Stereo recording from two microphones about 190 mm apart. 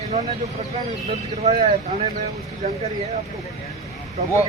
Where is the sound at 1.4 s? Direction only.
35° right (ahead or behind).